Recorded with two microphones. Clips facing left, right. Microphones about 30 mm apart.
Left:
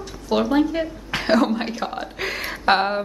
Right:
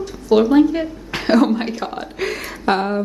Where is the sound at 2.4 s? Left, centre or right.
Left.